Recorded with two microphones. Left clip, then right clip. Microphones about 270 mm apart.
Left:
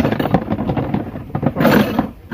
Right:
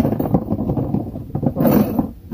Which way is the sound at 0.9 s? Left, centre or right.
Left.